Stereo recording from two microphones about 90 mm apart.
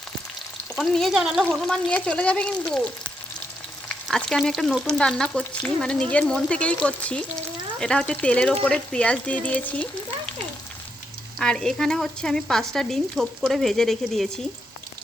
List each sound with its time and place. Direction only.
0.8 s speech: centre (ahead or behind)
1.9 s speech: 15° left (ahead or behind)
3.8 s frying: 5° left (ahead or behind)
4.9 s speech: 10° left (ahead or behind)
11.3 s speech: 5° left (ahead or behind)